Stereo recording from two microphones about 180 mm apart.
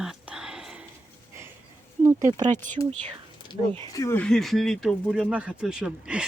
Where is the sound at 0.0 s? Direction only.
5° right (ahead or behind).